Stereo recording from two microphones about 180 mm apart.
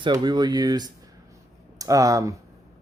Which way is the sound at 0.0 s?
25° right (ahead or behind).